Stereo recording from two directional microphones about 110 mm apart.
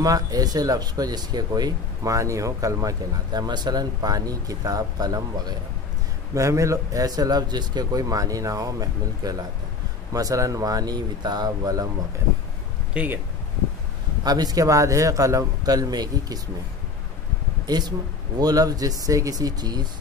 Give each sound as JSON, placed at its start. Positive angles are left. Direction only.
{"t": 0.0, "sound": "speech", "side_deg": -35}
{"t": 12.9, "sound": "speech", "side_deg": -15}
{"t": 14.2, "sound": "speech", "side_deg": -35}
{"t": 17.6, "sound": "speech", "side_deg": -40}